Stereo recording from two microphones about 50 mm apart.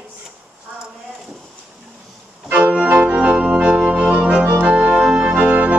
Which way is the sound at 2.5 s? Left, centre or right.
Right.